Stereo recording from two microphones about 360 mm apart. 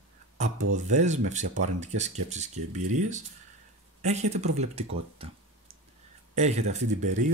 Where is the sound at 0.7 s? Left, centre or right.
Centre.